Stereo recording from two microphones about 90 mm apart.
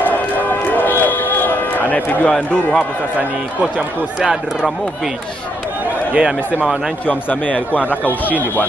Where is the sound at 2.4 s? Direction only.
15° left (ahead or behind).